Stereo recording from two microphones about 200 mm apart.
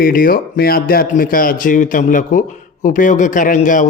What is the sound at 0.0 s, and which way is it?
Speech, 45° left (ahead or behind).